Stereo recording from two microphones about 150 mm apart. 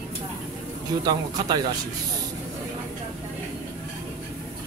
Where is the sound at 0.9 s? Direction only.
30° right (ahead or behind).